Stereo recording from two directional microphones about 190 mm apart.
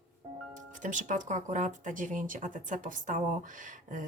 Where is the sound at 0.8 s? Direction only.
40° right (ahead or behind).